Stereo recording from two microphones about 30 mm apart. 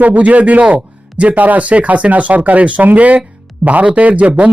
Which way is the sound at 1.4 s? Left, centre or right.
Right.